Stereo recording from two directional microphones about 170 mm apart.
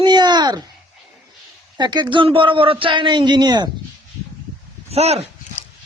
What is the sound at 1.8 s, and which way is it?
Speech, 25° right (ahead or behind).